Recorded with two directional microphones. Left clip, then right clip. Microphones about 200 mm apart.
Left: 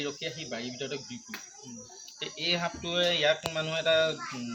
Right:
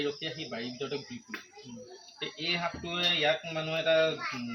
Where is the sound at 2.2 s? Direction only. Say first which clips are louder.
Left 2 dB; 25° left (ahead or behind).